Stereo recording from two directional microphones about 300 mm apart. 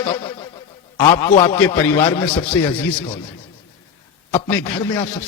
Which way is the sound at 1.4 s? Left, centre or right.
Centre.